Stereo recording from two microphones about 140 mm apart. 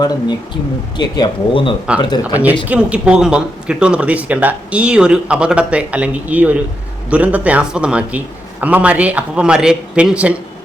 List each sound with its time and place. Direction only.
0.0 s speech: 30° left (ahead or behind)
2.3 s speech: 10° right (ahead or behind)